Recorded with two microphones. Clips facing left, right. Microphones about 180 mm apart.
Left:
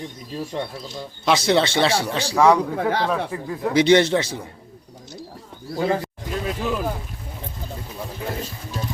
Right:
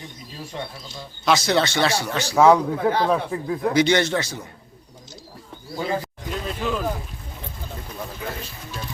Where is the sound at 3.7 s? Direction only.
30° left (ahead or behind).